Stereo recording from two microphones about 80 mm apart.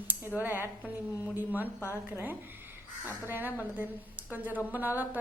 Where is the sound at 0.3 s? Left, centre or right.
Right.